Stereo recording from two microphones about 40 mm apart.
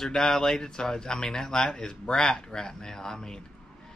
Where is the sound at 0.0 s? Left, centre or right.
Centre.